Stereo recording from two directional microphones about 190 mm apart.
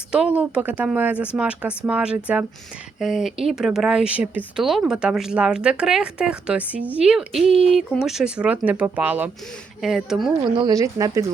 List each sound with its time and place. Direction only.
0.1 s speech: 5° right (ahead or behind)
10.5 s speech: 20° right (ahead or behind)